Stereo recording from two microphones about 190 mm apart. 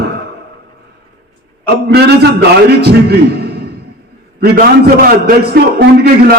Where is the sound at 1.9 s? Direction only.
60° right (ahead or behind).